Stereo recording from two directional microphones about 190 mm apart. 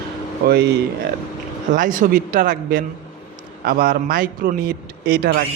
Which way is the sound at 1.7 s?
45° right (ahead or behind).